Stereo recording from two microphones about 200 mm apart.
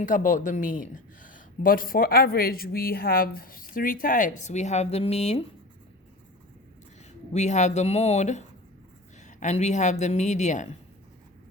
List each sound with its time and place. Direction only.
0.0 s speech: 40° left (ahead or behind)
7.3 s speech: 35° left (ahead or behind)